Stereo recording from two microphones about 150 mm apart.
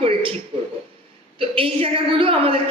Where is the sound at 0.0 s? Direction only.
40° right (ahead or behind).